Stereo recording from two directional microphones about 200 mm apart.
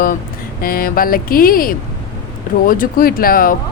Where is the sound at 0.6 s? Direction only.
45° left (ahead or behind).